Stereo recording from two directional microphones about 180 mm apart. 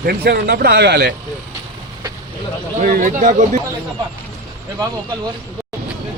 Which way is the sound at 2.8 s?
50° right (ahead or behind).